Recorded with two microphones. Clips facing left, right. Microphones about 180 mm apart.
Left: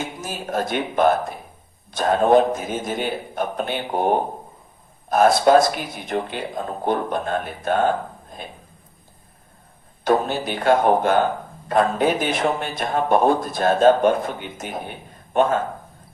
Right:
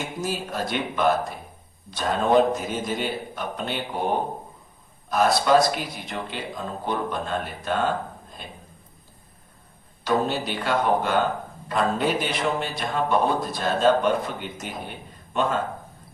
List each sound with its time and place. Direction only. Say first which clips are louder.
0.3 s speech: left 5 dB; 50° left (ahead or behind)
5.0 s speech: left 5 dB; 50° left (ahead or behind)
10.0 s a man's voice: left 4 dB; 50° left (ahead or behind)